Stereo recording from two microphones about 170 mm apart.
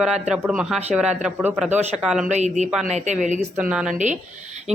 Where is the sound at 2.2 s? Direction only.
45° right (ahead or behind).